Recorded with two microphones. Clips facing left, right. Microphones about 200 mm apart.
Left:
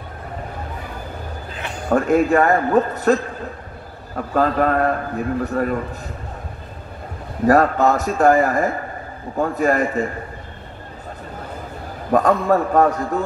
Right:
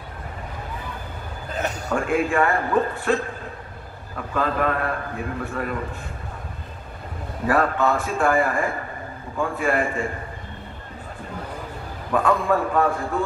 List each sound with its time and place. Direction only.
1.5 s a sound: 40° right (ahead or behind)
1.9 s a man's voice: 40° left (ahead or behind)
4.3 s a man's voice: 40° left (ahead or behind)
7.4 s a man's voice: 40° left (ahead or behind)
12.1 s a man's voice: 40° left (ahead or behind)